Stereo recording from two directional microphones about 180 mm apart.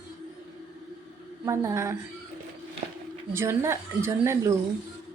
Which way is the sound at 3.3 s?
15° right (ahead or behind).